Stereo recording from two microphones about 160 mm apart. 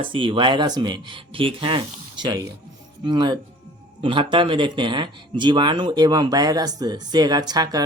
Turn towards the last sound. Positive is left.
turn(degrees=-25)  # may be behind; listen again after turning